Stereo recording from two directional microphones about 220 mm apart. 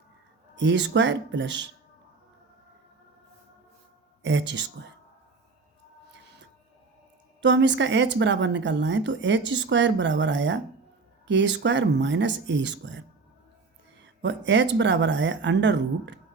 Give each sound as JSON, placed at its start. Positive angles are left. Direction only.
{"t": 0.5, "sound": "speech", "side_deg": -55}
{"t": 4.2, "sound": "speech", "side_deg": -55}
{"t": 6.1, "sound": "music", "side_deg": -55}
{"t": 7.4, "sound": "speech", "side_deg": -55}
{"t": 14.2, "sound": "speech", "side_deg": -55}